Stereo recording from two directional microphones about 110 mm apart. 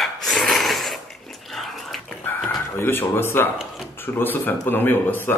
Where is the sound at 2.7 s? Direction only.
20° left (ahead or behind).